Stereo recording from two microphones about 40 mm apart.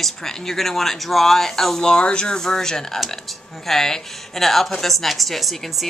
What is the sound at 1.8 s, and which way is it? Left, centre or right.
A woman's voice, left.